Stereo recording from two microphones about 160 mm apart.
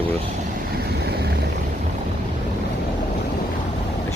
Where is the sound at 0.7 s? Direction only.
85° right.